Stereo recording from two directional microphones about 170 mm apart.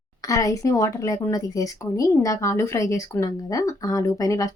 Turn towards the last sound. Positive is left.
turn(degrees=20)  # may be behind; listen again after turning